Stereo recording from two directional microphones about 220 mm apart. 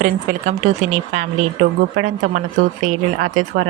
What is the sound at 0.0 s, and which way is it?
Speech, 35° right (ahead or behind).